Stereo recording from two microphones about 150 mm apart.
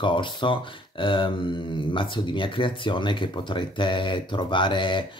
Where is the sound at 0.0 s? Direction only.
35° left (ahead or behind).